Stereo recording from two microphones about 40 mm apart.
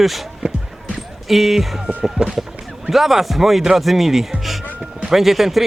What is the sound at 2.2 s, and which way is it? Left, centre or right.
Speech, right.